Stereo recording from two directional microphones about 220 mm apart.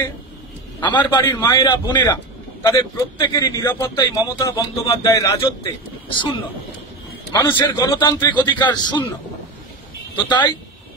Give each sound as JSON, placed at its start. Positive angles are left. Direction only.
{"t": 0.7, "sound": "a man's voice", "side_deg": 20}
{"t": 7.3, "sound": "a man's voice", "side_deg": 15}
{"t": 10.1, "sound": "a man's voice", "side_deg": 20}